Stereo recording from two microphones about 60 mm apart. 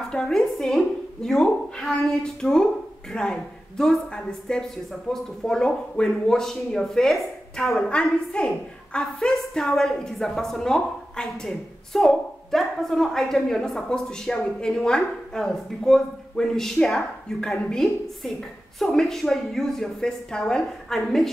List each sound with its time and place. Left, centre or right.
0.1 s a woman's voice: centre
7.9 s a woman's voice: centre
9.5 s a woman's voice: centre